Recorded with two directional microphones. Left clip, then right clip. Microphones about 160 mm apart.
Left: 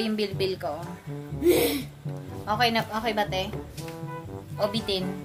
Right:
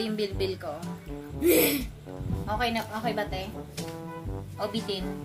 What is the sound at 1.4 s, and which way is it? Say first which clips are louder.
Music: left 1 dB; 75° right (ahead or behind).